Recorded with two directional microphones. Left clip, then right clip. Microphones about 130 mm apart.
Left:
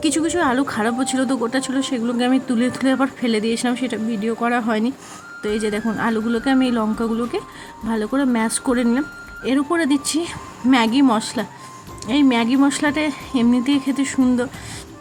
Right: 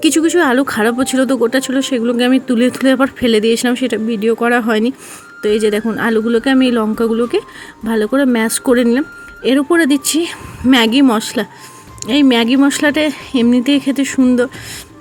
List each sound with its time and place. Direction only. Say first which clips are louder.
0.0 s speech: right 7 dB; 30° right (ahead or behind)